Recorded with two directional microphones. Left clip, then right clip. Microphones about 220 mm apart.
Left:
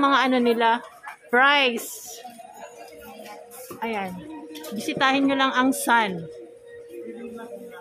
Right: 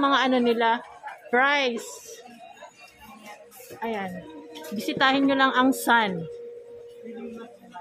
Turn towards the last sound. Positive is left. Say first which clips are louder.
# even
turn(degrees=-5)  # may be behind; listen again after turning